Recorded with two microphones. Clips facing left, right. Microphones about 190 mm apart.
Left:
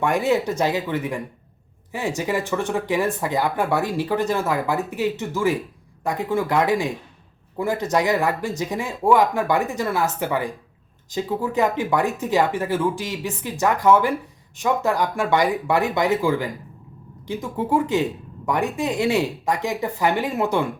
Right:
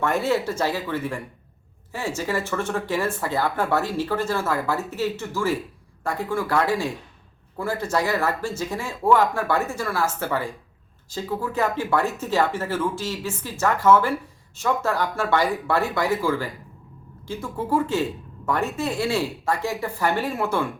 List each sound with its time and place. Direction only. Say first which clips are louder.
0.0 s speech: left 2 dB; 15° left (ahead or behind)